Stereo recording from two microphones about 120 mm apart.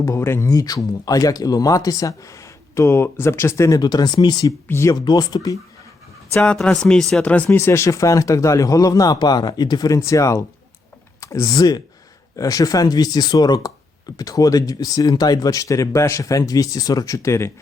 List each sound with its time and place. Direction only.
0.0 s speech: 25° left (ahead or behind)
3.8 s speech: 35° left (ahead or behind)
4.7 s speech: 25° left (ahead or behind)
6.3 s speech: 10° left (ahead or behind)